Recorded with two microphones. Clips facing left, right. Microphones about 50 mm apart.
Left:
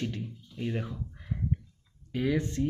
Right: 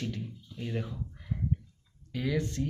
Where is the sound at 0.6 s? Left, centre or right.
Left.